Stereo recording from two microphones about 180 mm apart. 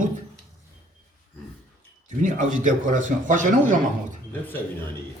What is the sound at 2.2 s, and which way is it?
A man's voice, 45° right (ahead or behind).